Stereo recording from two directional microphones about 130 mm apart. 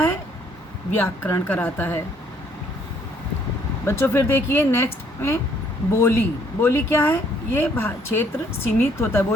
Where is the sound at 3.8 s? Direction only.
15° left (ahead or behind).